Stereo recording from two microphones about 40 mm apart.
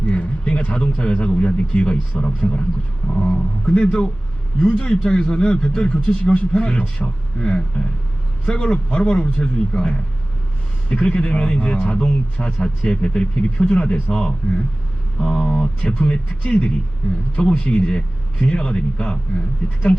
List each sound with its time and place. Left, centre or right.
0.1 s a man's voice: left